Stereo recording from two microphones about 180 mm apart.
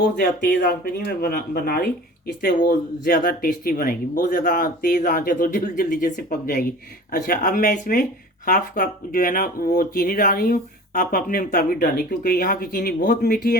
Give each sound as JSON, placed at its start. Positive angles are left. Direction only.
{"t": 0.2, "sound": "speech", "side_deg": 55}